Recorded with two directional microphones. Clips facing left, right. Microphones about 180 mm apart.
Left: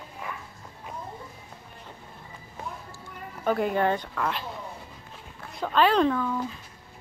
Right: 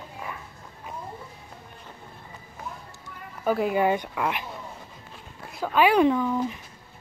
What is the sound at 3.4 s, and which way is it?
Speech, 5° right (ahead or behind).